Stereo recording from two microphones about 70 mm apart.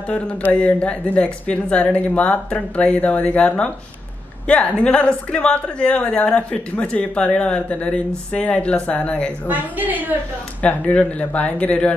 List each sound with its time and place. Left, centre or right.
0.1 s speech: left
9.5 s a woman's voice: right
10.6 s speech: left